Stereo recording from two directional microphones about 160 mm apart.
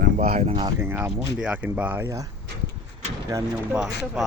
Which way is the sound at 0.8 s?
15° right (ahead or behind).